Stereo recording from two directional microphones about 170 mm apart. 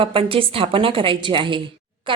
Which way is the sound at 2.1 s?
30° right (ahead or behind).